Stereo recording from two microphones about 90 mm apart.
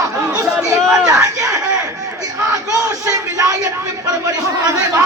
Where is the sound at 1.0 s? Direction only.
40° right (ahead or behind).